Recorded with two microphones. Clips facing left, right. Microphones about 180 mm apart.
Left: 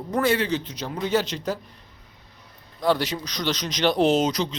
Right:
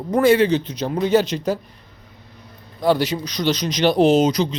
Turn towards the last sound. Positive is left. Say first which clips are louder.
# right 5 dB
turn(degrees=0)  # may be behind; listen again after turning